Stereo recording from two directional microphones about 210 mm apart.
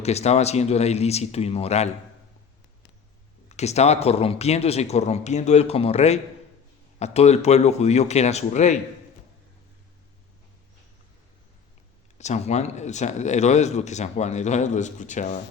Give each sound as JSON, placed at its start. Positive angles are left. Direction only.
{"t": 0.0, "sound": "speech", "side_deg": 30}
{"t": 3.5, "sound": "speech", "side_deg": 30}
{"t": 12.1, "sound": "speech", "side_deg": 35}